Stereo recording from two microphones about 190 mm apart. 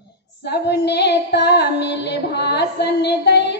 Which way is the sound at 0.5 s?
60° left (ahead or behind).